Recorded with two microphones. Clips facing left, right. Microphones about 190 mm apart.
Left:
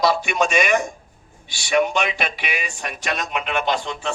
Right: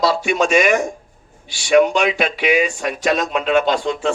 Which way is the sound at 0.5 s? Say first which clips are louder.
Right 4 dB; 45° right (ahead or behind).